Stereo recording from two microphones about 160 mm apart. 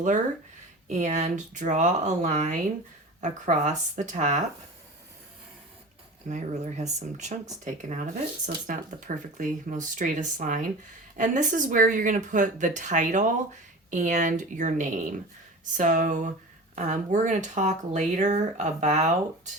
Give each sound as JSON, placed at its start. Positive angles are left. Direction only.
{"t": 0.9, "sound": "speech", "side_deg": -50}
{"t": 6.2, "sound": "speech", "side_deg": -45}